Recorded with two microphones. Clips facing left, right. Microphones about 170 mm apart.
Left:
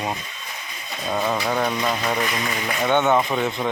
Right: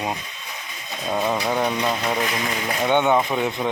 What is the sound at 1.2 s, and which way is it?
Speech, 15° right (ahead or behind).